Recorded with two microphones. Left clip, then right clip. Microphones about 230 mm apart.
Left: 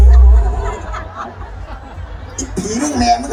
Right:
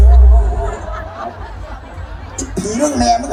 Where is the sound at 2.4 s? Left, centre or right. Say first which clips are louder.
Right 3 dB; centre.